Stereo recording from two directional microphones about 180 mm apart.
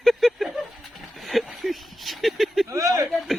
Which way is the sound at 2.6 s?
20° right (ahead or behind).